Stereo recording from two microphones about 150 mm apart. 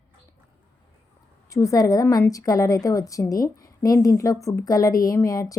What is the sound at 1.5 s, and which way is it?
A woman's voice, 20° left (ahead or behind).